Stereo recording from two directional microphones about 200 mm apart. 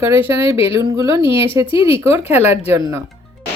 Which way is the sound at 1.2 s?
25° left (ahead or behind).